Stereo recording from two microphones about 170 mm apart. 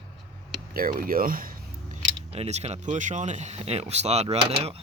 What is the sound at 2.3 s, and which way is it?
Speech, 40° right (ahead or behind).